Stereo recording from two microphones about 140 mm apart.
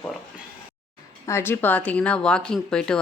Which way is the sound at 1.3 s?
15° left (ahead or behind).